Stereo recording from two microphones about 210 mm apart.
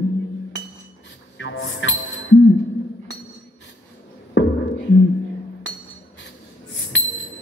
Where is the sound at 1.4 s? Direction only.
60° left (ahead or behind).